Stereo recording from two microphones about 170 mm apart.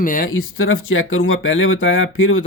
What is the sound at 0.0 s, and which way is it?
Speech, 55° left (ahead or behind).